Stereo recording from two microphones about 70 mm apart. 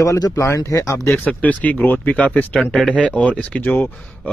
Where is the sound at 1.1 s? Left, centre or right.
Centre.